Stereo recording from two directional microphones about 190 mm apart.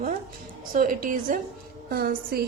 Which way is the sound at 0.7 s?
45° right (ahead or behind).